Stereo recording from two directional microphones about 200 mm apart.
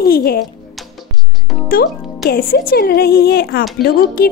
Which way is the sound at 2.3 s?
45° left (ahead or behind).